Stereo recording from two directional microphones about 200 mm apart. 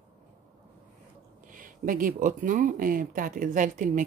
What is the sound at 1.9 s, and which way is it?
Speech, 45° right (ahead or behind).